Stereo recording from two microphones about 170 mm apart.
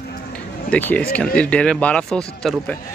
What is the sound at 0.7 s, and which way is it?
Speech, 10° left (ahead or behind).